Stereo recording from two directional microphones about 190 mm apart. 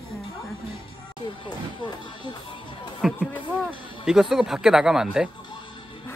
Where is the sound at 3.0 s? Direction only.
Centre (ahead or behind).